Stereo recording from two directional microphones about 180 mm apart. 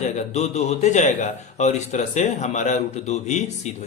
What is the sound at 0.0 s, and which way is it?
Speech, 40° left (ahead or behind).